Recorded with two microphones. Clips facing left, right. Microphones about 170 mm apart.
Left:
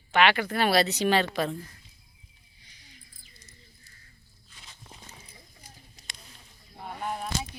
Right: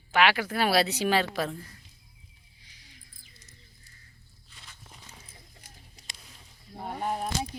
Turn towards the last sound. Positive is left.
turn(degrees=-45)  # may be behind; listen again after turning